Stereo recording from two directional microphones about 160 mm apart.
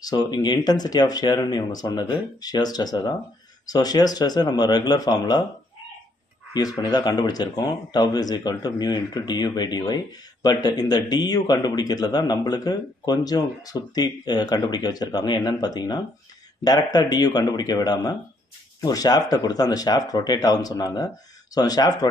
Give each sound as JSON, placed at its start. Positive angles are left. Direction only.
{"t": 0.0, "sound": "speech", "side_deg": 25}
{"t": 6.5, "sound": "speech", "side_deg": 25}